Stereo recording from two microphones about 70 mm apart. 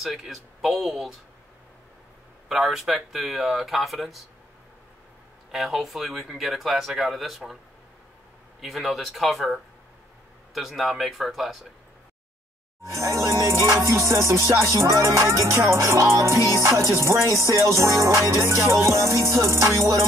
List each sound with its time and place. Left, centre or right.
0.0 s speech: centre
2.4 s speech: centre
5.5 s speech: centre
8.5 s speech: centre
12.8 s music: right